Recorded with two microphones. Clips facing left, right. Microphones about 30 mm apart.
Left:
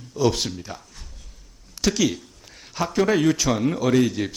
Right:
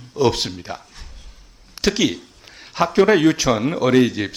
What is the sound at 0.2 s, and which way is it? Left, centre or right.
Speech, right.